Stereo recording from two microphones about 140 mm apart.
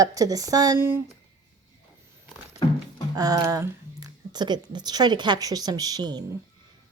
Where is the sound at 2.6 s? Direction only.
35° left (ahead or behind).